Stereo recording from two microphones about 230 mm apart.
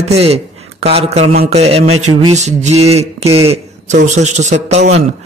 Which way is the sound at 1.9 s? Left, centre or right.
Right.